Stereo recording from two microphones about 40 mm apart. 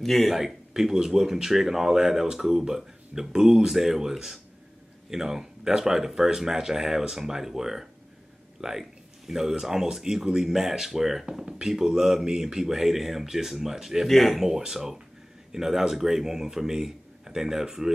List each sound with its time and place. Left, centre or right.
0.0 s speech: centre
0.4 s speech: centre
11.2 s speech: right
14.0 s speech: centre
14.4 s speech: centre